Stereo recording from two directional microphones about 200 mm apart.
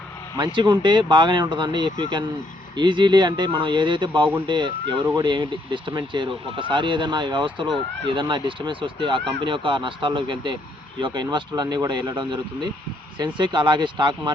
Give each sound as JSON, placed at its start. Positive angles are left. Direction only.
{"t": 0.3, "sound": "speech", "side_deg": -20}